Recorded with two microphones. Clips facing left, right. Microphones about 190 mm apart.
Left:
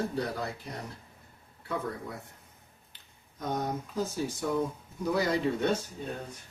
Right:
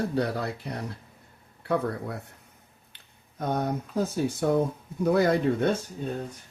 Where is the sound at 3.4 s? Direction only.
60° right (ahead or behind).